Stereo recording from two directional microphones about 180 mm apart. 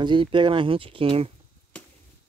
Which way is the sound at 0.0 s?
25° right (ahead or behind).